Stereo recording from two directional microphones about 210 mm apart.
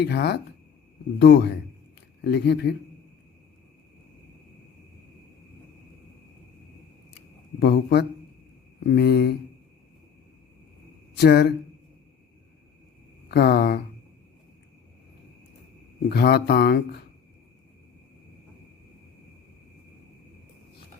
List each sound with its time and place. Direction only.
0.0 s speech: 50° left (ahead or behind)
7.6 s speech: 50° left (ahead or behind)
11.2 s speech: 50° left (ahead or behind)
13.2 s speech: 50° left (ahead or behind)
16.0 s speech: 50° left (ahead or behind)